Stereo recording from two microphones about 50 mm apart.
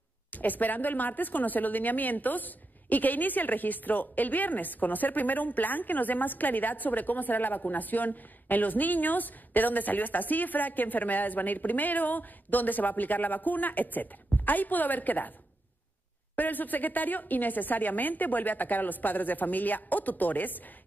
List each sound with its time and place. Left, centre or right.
0.3 s a woman's voice: left
16.3 s a woman's voice: left